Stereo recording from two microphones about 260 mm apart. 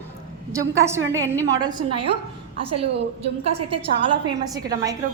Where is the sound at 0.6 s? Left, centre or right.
Centre.